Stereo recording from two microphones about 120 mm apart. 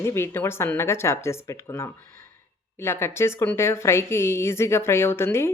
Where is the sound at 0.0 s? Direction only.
20° left (ahead or behind).